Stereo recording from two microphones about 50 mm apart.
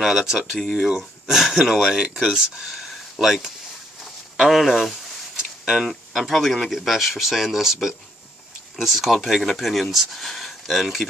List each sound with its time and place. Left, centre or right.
0.0 s speech: centre
0.8 s speech: centre
4.0 s a sound: centre
5.7 s speech: centre